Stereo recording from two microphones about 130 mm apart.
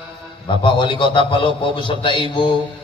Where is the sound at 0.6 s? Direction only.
40° left (ahead or behind).